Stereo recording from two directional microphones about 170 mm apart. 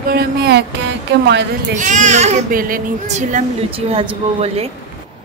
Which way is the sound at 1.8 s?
45° right (ahead or behind).